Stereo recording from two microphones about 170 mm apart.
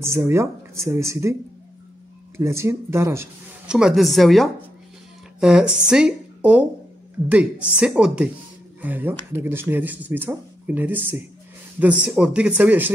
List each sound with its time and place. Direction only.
0.0 s speech: 15° right (ahead or behind)
2.3 s speech: 15° right (ahead or behind)
3.7 s speech: centre (ahead or behind)